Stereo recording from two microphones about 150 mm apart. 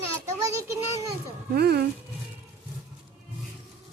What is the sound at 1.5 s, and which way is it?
Speech, 90° right.